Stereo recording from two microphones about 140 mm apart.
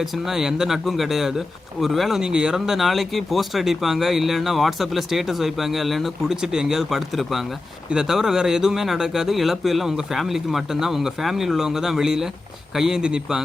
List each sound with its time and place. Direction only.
0.0 s speech: 5° right (ahead or behind)